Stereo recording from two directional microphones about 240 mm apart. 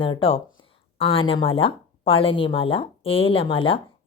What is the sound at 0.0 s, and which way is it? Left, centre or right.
Speech, left.